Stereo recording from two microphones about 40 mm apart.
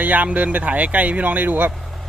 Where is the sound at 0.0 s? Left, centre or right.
Right.